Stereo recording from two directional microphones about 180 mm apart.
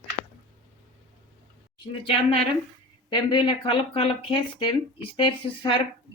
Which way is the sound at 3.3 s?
30° left (ahead or behind).